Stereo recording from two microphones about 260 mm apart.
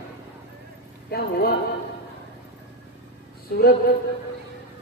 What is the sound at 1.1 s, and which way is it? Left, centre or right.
Speech, left.